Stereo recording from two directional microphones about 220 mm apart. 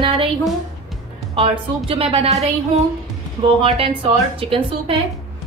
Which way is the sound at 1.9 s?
25° right (ahead or behind).